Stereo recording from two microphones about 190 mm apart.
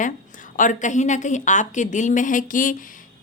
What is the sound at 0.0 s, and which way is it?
A woman's voice, 45° left (ahead or behind).